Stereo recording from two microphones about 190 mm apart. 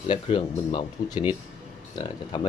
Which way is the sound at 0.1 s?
25° left (ahead or behind).